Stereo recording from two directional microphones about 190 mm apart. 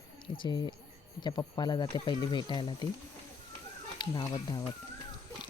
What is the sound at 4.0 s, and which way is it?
Speech, 20° left (ahead or behind).